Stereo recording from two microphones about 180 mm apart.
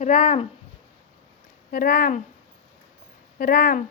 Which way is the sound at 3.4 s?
55° left (ahead or behind).